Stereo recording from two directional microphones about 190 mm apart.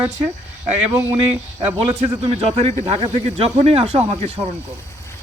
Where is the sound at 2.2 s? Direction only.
30° right (ahead or behind).